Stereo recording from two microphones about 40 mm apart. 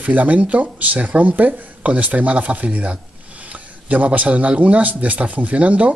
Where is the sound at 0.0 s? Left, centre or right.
Right.